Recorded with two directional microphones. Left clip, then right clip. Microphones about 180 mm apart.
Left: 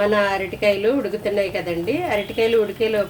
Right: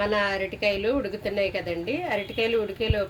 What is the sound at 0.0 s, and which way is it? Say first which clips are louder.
A woman's voice: left 6 dB; centre (ahead or behind).